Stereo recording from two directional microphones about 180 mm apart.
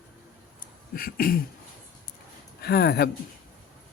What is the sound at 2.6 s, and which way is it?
Speech, 60° left (ahead or behind).